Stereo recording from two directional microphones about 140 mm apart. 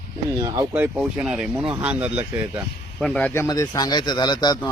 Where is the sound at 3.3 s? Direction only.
20° left (ahead or behind).